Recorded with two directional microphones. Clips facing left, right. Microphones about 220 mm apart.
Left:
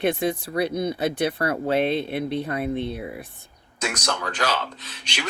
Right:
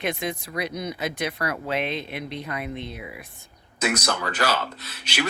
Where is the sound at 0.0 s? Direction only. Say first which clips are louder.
Left 6 dB; 30° left (ahead or behind).